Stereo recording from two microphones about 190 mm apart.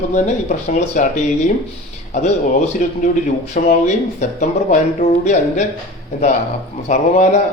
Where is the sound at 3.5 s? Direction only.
35° left (ahead or behind).